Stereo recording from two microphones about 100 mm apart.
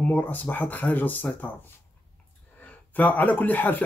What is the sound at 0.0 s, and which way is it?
Speech, 15° left (ahead or behind).